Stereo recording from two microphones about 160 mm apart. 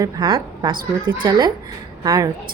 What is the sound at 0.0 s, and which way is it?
A woman's voice, 25° right (ahead or behind).